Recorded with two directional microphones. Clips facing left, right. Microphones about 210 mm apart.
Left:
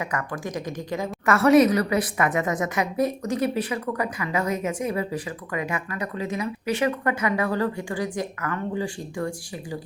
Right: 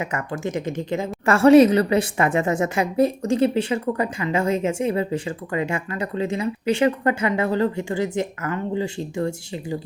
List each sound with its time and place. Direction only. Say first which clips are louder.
0.0 s a woman's voice: right 3 dB; 25° right (ahead or behind)